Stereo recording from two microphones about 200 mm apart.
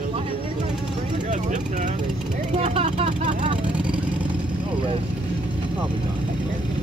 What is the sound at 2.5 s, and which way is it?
Vehicle, 30° right (ahead or behind).